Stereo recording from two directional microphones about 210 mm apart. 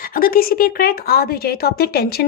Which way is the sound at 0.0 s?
45° left (ahead or behind).